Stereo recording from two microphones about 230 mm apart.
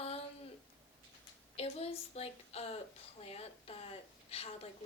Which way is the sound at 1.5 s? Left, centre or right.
Left.